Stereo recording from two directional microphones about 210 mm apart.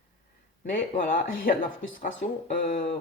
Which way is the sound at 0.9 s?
40° left (ahead or behind).